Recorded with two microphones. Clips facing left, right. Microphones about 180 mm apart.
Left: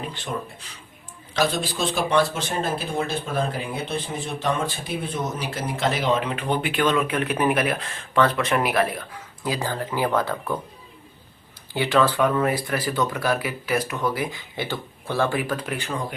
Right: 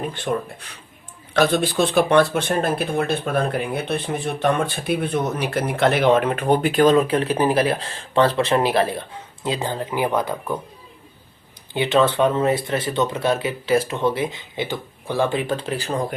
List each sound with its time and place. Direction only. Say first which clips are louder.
0.1 s speech: right 6 dB; 50° right (ahead or behind); by 10.6 s 15° right (ahead or behind)
11.7 s speech: right 2 dB; 20° right (ahead or behind)